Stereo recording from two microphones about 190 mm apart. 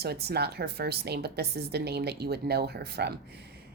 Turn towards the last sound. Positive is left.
turn(degrees=-60)  # may be behind; listen again after turning